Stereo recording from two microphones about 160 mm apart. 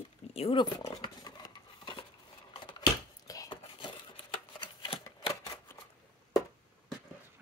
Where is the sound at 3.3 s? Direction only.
25° left (ahead or behind).